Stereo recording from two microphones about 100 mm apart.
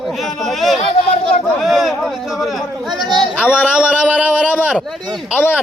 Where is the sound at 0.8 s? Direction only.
90° left.